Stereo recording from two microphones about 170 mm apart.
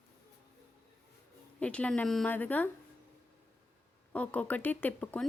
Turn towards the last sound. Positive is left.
turn(degrees=10)  # may be behind; listen again after turning